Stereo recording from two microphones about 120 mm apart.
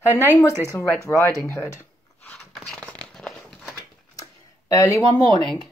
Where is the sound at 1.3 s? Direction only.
30° right (ahead or behind).